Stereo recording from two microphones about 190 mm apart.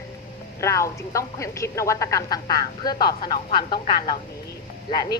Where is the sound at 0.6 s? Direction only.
15° left (ahead or behind).